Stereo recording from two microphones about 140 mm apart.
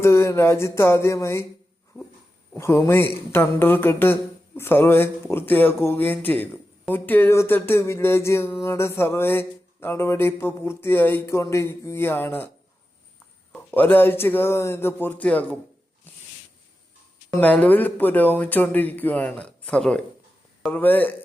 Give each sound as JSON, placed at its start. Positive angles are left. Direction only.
{"t": 0.0, "sound": "a sound", "side_deg": 20}
{"t": 2.6, "sound": "speech", "side_deg": 20}
{"t": 13.5, "sound": "speech", "side_deg": 15}
{"t": 17.4, "sound": "speech", "side_deg": 10}